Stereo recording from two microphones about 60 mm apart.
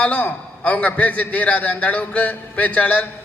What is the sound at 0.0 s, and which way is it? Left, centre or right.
A man's voice, left.